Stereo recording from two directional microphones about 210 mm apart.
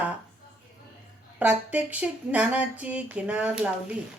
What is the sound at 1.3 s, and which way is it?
Speech, 5° right (ahead or behind).